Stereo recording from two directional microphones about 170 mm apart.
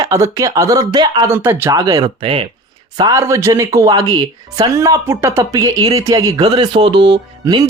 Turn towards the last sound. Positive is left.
turn(degrees=-25)  # may be behind; listen again after turning